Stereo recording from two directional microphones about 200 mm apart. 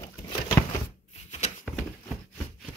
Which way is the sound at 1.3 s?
35° left (ahead or behind).